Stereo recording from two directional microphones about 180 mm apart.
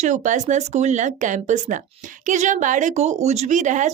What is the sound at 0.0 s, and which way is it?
Speech, 45° right (ahead or behind).